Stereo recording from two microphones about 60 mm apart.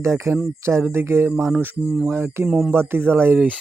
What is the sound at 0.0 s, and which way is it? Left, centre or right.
Speech, right.